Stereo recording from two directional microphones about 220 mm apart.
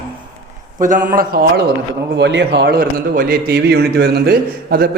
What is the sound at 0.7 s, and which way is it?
Speech, 35° right (ahead or behind).